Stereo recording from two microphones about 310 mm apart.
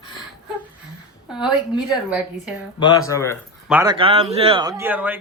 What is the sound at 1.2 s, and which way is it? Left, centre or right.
Speech, centre.